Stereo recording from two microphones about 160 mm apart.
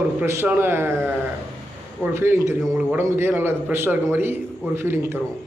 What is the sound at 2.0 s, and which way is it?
A man's voice, 15° right (ahead or behind).